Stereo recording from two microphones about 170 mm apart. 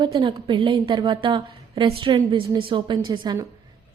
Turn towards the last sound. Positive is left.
turn(degrees=-25)  # may be behind; listen again after turning